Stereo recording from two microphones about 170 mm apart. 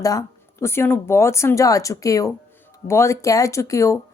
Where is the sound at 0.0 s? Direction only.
20° left (ahead or behind).